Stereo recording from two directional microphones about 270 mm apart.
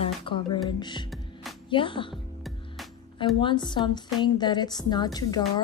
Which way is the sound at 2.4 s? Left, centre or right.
Centre.